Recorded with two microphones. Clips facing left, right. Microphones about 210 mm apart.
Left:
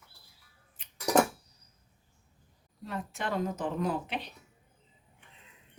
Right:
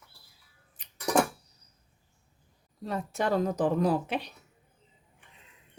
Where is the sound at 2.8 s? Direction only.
40° right (ahead or behind).